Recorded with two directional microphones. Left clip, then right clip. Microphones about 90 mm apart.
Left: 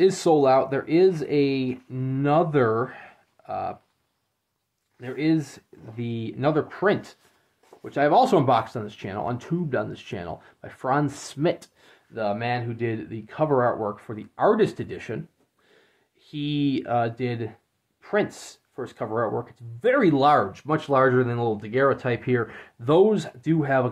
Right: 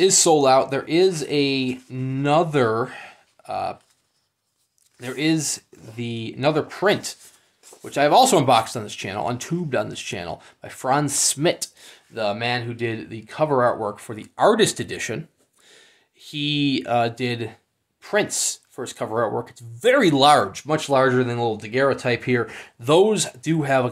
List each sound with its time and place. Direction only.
0.0 s speech: 5° right (ahead or behind)
5.0 s speech: 30° right (ahead or behind)
6.0 s speech: 10° right (ahead or behind)
14.1 s speech: 25° right (ahead or behind)